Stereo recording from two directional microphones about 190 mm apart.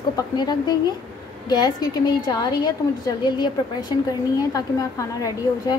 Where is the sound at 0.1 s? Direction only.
20° left (ahead or behind).